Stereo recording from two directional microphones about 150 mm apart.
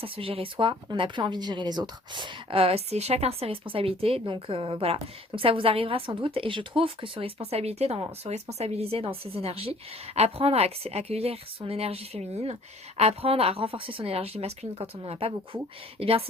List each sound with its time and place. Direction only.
0.0 s a woman's voice: 40° right (ahead or behind)